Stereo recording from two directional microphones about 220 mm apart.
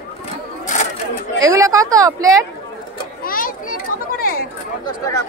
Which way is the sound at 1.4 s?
15° right (ahead or behind).